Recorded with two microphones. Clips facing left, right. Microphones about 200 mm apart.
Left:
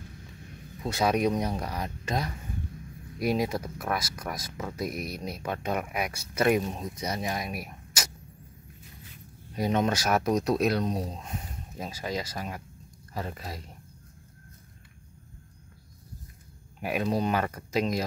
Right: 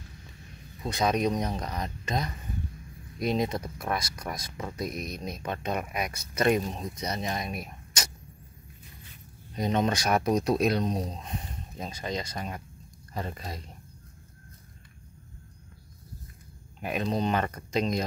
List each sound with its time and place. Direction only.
0.8 s speech: 5° left (ahead or behind)
9.6 s speech: 5° left (ahead or behind)
16.8 s speech: 10° left (ahead or behind)